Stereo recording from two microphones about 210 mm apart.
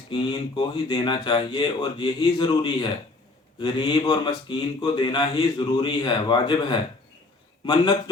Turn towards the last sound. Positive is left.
turn(degrees=20)  # may be behind; listen again after turning